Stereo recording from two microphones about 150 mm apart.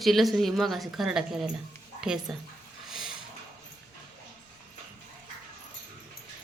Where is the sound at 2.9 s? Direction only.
5° right (ahead or behind).